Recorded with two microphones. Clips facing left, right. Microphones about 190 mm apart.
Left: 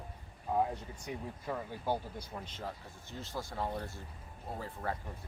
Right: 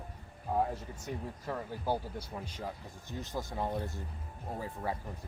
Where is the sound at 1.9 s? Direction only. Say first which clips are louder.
Right 1 dB; 10° right (ahead or behind).